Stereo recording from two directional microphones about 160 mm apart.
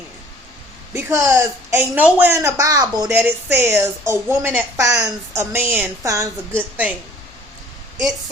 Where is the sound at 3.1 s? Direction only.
10° right (ahead or behind).